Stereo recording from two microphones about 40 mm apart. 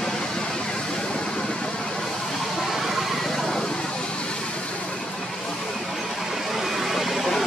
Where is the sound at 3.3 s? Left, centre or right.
Centre.